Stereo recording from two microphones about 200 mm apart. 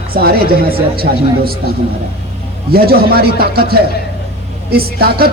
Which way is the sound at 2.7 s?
50° right (ahead or behind).